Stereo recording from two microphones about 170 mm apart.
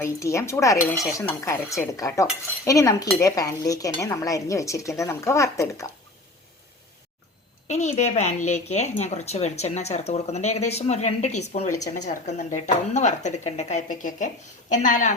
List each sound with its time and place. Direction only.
0.0 s speech: 15° left (ahead or behind)
0.9 s cutlery: centre (ahead or behind)
1.8 s dishes: 20° left (ahead or behind)
4.9 s speech: 15° left (ahead or behind)
7.7 s a woman's voice: 45° left (ahead or behind)